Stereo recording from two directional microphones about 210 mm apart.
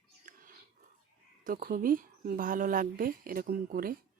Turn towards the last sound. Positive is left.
turn(degrees=-45)  # may be behind; listen again after turning